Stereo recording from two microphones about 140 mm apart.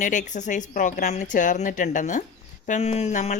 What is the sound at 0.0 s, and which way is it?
Speech, 60° left (ahead or behind).